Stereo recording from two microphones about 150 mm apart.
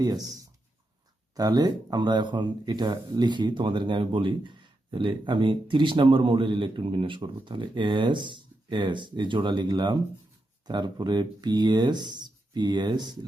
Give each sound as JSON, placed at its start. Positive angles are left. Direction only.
{"t": 0.0, "sound": "speech", "side_deg": -25}
{"t": 1.4, "sound": "speech", "side_deg": -30}